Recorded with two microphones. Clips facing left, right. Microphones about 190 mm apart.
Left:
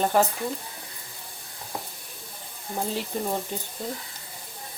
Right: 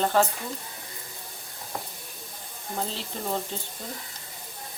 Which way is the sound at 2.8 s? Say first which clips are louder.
Left 5 dB; 10° left (ahead or behind).